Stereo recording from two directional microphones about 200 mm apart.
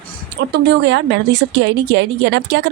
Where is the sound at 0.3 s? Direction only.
55° right (ahead or behind).